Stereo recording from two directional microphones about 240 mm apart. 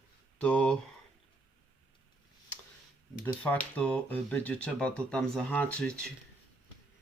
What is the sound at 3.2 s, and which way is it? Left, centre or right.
Speech, centre.